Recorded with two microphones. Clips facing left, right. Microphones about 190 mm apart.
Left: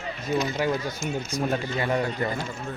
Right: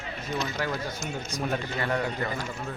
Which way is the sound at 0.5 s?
20° left (ahead or behind).